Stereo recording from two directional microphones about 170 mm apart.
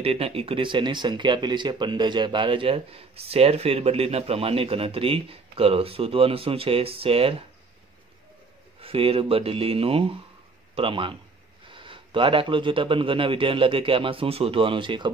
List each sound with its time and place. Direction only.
0.0 s speech: 35° right (ahead or behind)
8.8 s speech: 35° right (ahead or behind)